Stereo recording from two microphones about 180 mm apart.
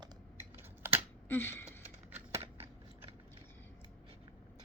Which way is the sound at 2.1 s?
10° right (ahead or behind).